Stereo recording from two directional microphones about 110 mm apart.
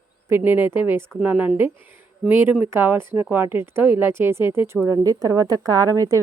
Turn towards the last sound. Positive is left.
turn(degrees=-30)  # may be behind; listen again after turning